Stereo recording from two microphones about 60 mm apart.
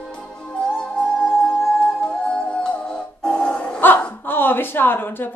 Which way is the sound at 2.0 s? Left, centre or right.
Centre.